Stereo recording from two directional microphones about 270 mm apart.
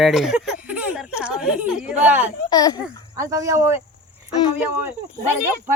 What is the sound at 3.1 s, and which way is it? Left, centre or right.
Speech, centre.